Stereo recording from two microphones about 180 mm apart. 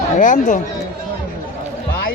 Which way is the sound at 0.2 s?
45° left (ahead or behind).